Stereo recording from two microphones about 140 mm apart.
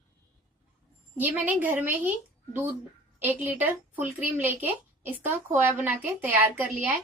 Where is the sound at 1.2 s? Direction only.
10° right (ahead or behind).